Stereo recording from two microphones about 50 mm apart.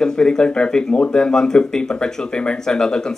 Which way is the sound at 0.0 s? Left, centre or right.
Centre.